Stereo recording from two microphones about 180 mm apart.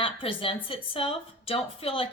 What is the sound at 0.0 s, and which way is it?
A woman's voice, 30° left (ahead or behind).